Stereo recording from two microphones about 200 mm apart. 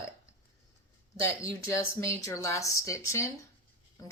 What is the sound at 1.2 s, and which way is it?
Speech, 15° left (ahead or behind).